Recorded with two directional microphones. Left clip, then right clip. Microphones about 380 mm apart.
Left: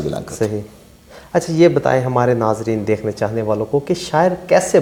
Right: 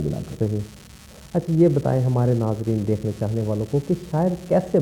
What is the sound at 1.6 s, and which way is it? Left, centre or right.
Speech, centre.